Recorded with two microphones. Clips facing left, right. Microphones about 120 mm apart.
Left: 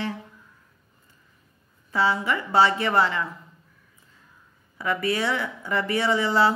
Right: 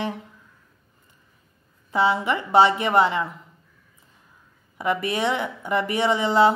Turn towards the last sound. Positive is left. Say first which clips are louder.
# right 3 dB
turn(degrees=-20)  # may be behind; listen again after turning